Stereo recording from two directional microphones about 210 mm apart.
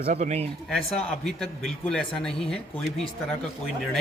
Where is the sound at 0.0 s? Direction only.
35° right (ahead or behind).